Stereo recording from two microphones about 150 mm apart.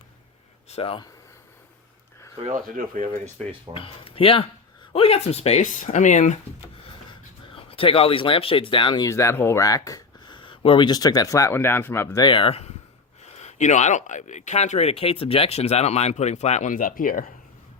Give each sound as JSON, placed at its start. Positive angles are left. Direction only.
{"t": 0.7, "sound": "speech", "side_deg": 40}
{"t": 2.6, "sound": "speech", "side_deg": -70}
{"t": 3.8, "sound": "speech", "side_deg": 40}
{"t": 7.1, "sound": "speech", "side_deg": 35}
{"t": 9.0, "sound": "speech", "side_deg": 20}
{"t": 12.2, "sound": "speech", "side_deg": 35}